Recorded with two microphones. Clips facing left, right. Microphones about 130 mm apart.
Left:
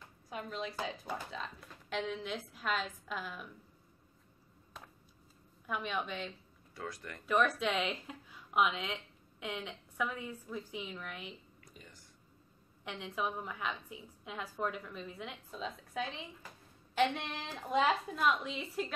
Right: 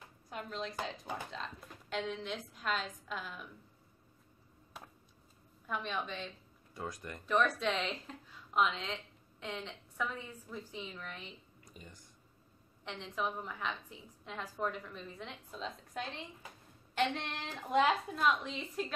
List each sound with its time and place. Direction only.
0.3 s a woman's voice: 5° left (ahead or behind)
5.7 s a woman's voice: 5° left (ahead or behind)
6.7 s speech: 15° right (ahead or behind)
7.2 s a woman's voice: 5° left (ahead or behind)
12.8 s a woman's voice: 10° left (ahead or behind)